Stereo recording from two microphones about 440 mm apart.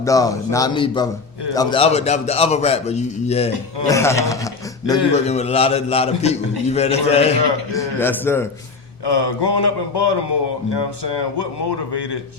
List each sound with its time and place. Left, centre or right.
0.0 s a man's voice: centre
9.0 s a man's voice: left